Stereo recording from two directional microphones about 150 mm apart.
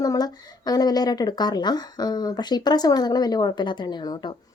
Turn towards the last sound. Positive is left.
turn(degrees=30)  # may be behind; listen again after turning